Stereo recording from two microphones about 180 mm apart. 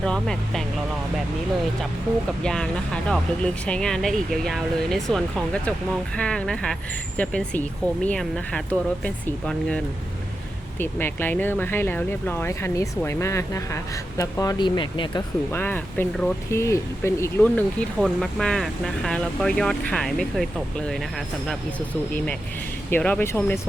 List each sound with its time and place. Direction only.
0.0 s speech: 5° left (ahead or behind)
2.4 s speech: 5° left (ahead or behind); by 15.2 s 25° left (ahead or behind)
15.5 s speech: 10° left (ahead or behind)
17.5 s speech: 5° left (ahead or behind)
22.9 s speech: 10° left (ahead or behind)